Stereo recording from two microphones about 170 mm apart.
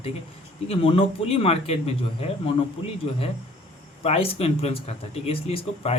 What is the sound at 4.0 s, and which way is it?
Speech, 35° left (ahead or behind).